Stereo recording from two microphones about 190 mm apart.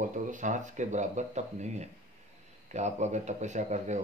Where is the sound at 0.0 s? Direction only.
40° right (ahead or behind).